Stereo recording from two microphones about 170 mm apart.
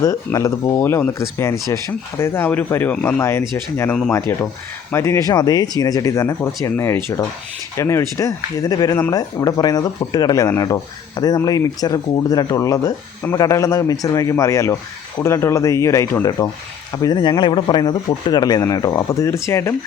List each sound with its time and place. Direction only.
0.0 s speech: 20° left (ahead or behind)